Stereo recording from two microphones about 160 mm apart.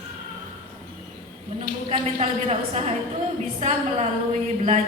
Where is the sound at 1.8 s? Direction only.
40° right (ahead or behind).